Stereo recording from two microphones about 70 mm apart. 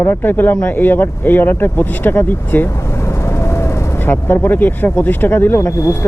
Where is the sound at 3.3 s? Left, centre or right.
Left.